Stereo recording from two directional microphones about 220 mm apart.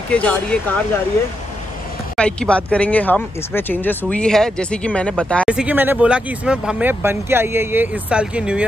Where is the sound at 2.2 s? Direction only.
5° left (ahead or behind).